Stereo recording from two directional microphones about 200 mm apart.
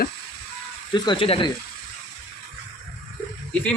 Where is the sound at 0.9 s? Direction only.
25° left (ahead or behind).